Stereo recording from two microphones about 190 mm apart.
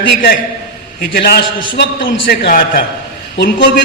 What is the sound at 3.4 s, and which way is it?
Speech, 65° left (ahead or behind).